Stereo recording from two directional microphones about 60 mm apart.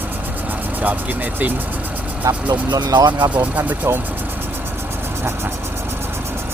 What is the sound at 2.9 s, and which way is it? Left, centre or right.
Speech, right.